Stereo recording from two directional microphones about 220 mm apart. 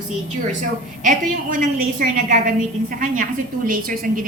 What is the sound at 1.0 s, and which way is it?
A woman's voice, 35° right (ahead or behind).